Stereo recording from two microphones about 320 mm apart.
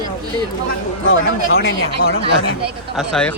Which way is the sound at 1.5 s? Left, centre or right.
Left.